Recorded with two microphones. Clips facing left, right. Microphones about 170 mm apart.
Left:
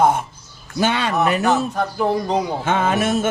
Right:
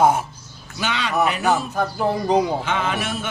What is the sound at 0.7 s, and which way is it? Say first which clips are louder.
Speech: left 3 dB; 50° left (ahead or behind).